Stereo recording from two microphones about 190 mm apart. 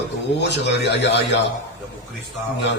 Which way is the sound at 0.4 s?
65° left (ahead or behind).